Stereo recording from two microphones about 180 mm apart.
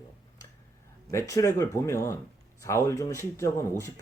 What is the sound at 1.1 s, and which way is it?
Speech, 15° left (ahead or behind).